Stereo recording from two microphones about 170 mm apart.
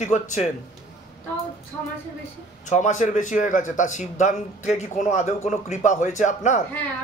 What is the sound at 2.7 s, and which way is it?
A man's voice, 45° left (ahead or behind).